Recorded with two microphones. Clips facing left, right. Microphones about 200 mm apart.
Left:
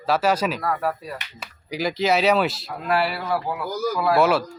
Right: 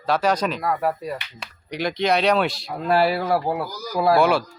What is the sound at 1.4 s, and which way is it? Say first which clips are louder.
Speech: left 3 dB; 5° left (ahead or behind).